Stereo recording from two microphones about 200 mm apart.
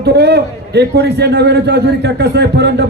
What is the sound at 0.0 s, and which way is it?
A man's voice, 55° right (ahead or behind).